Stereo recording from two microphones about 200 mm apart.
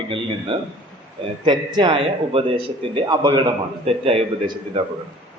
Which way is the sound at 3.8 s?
30° right (ahead or behind).